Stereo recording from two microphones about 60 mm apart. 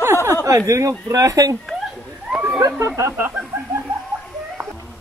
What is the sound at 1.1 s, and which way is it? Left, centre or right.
Speech, right.